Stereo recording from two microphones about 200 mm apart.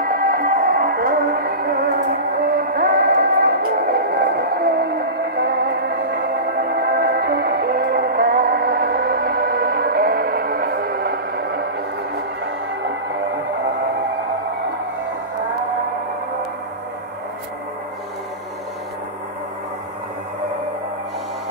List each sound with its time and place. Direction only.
0.0 s music: 45° right (ahead or behind)